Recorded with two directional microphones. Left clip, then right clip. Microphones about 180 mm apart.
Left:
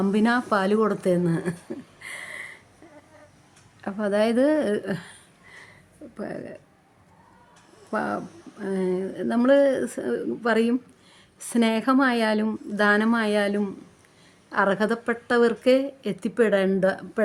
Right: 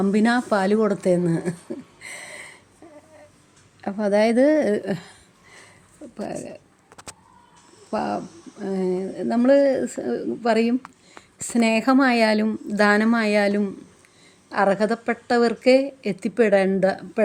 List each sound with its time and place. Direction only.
0.0 s speech: 10° right (ahead or behind)
2.0 s a sound: 10° right (ahead or behind)
3.8 s speech: 10° right (ahead or behind)
7.9 s speech: 10° right (ahead or behind)